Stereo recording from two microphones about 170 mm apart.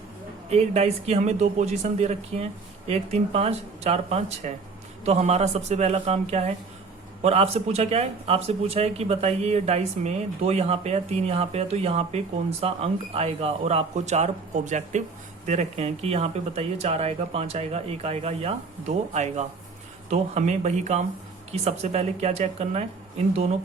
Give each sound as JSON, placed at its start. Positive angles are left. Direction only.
{"t": 0.5, "sound": "speech", "side_deg": -40}